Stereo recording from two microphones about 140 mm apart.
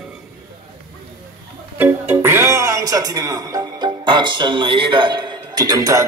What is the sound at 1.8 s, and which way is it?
Music, 15° right (ahead or behind).